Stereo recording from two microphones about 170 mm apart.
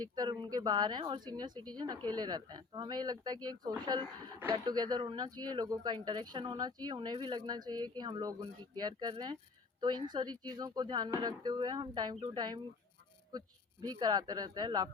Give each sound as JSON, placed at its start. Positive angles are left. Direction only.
{"t": 0.0, "sound": "speech", "side_deg": -25}
{"t": 13.8, "sound": "speech", "side_deg": -25}